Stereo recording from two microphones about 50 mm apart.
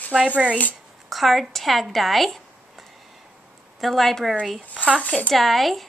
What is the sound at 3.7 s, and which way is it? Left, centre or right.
Speech, centre.